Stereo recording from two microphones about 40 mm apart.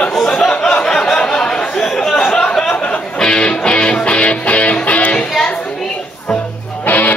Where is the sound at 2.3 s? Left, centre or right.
Left.